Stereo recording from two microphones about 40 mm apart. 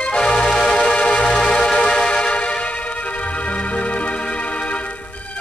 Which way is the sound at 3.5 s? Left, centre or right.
Left.